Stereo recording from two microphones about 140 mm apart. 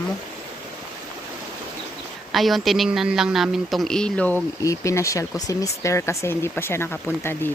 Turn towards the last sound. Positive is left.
turn(degrees=15)  # may be behind; listen again after turning